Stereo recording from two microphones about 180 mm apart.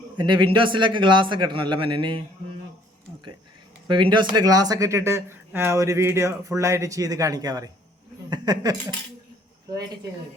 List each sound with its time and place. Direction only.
0.2 s a man's voice: 25° right (ahead or behind)
3.8 s a man's voice: 25° right (ahead or behind)
8.3 s a sound: 20° right (ahead or behind)
9.6 s a man's voice: 20° right (ahead or behind)